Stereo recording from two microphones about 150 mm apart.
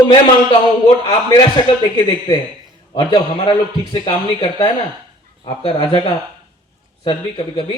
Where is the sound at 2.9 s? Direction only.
35° left (ahead or behind).